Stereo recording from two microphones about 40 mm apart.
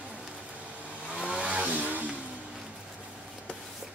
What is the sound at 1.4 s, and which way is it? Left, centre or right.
Vehicle, right.